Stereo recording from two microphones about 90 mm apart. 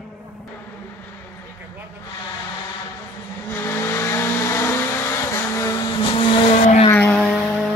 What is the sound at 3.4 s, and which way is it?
Vehicle, 25° left (ahead or behind).